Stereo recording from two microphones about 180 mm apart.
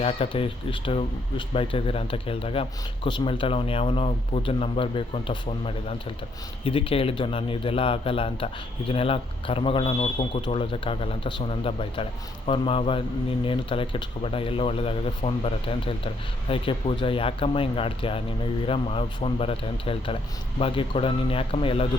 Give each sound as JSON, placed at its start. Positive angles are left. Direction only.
{"t": 0.0, "sound": "a man's voice", "side_deg": 30}